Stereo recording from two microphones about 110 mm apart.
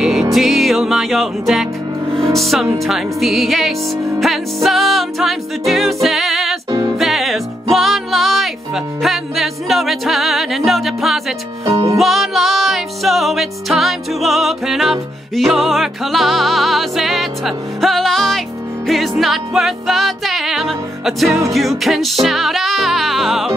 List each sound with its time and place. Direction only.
0.0 s music: 5° right (ahead or behind)
2.1 s speech: centre (ahead or behind)
2.8 s music: centre (ahead or behind)
11.6 s music: 30° right (ahead or behind)
12.0 s music: centre (ahead or behind)